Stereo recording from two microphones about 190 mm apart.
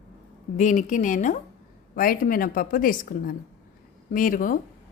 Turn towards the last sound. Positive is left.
turn(degrees=45)  # may be behind; listen again after turning